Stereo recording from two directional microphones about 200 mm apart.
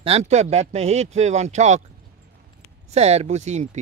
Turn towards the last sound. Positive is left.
turn(degrees=-35)  # may be behind; listen again after turning